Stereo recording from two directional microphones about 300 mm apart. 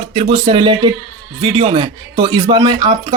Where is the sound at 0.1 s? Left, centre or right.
Right.